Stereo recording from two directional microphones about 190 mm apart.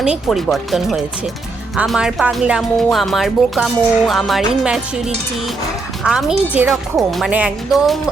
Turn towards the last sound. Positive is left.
turn(degrees=0)  # may be behind; listen again after turning